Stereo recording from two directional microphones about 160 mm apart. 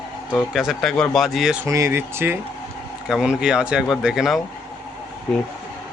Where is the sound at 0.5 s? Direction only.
Centre (ahead or behind).